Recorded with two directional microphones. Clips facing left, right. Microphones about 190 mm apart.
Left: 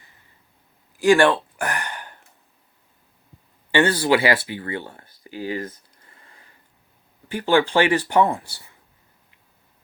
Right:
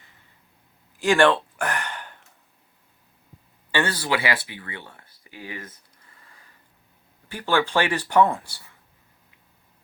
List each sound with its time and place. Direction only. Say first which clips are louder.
0.9 s a sound: left 3 dB; 10° left (ahead or behind)
3.7 s speech: left 6 dB; 25° left (ahead or behind)
7.3 s speech: left 5 dB; 15° left (ahead or behind)